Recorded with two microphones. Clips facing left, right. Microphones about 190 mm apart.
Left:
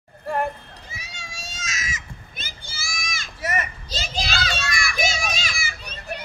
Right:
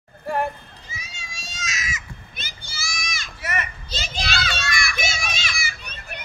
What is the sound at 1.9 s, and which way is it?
Children playing, 45° left (ahead or behind).